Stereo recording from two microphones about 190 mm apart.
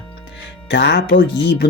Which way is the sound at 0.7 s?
65° left (ahead or behind).